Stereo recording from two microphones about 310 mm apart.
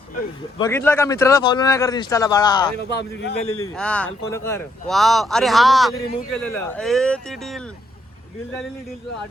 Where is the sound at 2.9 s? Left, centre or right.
Left.